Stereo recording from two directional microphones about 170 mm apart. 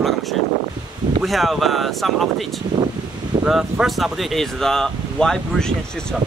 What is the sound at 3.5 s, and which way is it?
Speech, centre (ahead or behind).